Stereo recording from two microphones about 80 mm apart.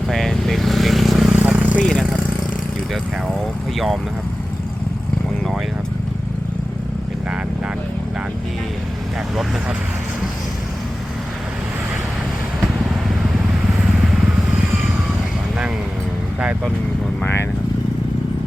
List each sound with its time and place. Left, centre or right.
0.1 s vehicle: centre
1.3 s vehicle: centre
1.8 s vehicle: centre
9.3 s speech: centre